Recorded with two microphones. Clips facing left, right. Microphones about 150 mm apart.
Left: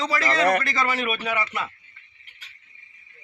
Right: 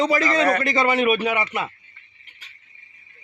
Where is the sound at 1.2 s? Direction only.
15° right (ahead or behind).